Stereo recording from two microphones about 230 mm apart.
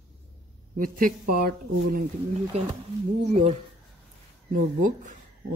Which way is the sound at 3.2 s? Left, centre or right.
Right.